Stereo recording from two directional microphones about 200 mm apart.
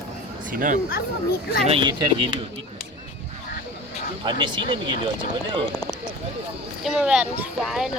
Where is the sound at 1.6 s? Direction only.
25° right (ahead or behind).